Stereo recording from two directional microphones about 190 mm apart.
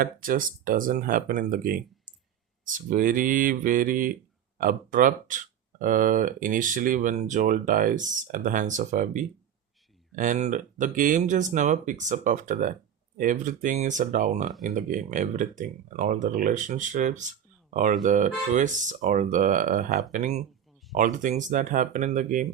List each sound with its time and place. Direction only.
0.0 s speech: 45° right (ahead or behind)